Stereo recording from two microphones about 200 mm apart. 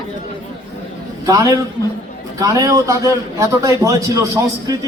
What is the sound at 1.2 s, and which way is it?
A man's voice, 15° right (ahead or behind).